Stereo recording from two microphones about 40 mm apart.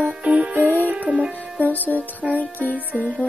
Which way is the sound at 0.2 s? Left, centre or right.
Right.